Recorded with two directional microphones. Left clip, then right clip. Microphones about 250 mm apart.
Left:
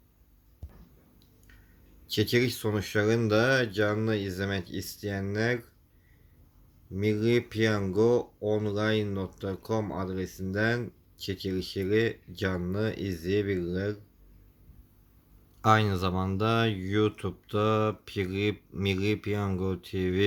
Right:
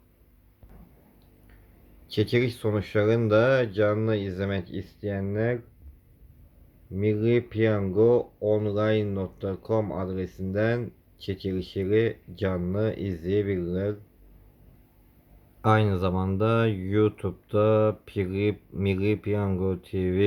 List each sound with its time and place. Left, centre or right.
2.0 s speech: centre
6.9 s speech: centre
15.6 s speech: centre